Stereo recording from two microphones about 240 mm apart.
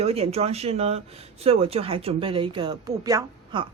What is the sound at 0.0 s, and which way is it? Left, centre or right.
Speech, right.